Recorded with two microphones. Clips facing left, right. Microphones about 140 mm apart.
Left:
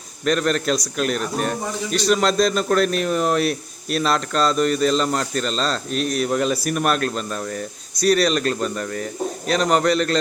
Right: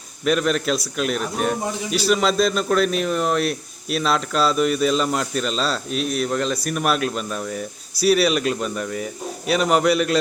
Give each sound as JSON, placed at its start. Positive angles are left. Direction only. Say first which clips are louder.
{"t": 0.3, "sound": "speech", "louder": "even", "side_deg": -5}